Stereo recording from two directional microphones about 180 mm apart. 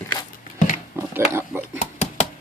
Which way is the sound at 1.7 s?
40° left (ahead or behind).